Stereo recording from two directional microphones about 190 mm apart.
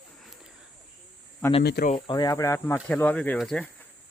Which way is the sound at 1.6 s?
60° left (ahead or behind).